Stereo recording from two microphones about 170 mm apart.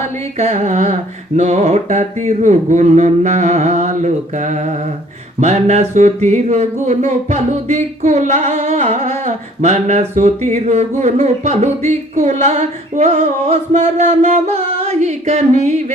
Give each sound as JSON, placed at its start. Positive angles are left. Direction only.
{"t": 0.3, "sound": "carnatic music", "side_deg": -45}
{"t": 1.4, "sound": "music", "side_deg": -40}
{"t": 13.5, "sound": "chant", "side_deg": -45}